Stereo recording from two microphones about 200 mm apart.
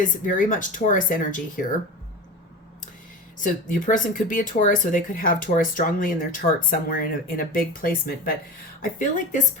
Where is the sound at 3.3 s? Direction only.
40° left (ahead or behind).